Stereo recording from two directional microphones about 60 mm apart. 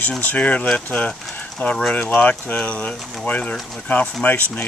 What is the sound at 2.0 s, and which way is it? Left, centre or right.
Speech, left.